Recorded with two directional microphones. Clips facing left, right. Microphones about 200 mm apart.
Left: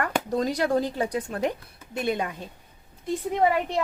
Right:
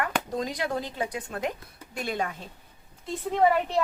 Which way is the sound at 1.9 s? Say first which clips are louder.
Left 4 dB; 20° left (ahead or behind).